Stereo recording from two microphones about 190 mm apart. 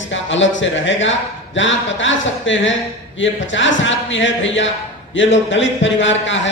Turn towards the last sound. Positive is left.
turn(degrees=80)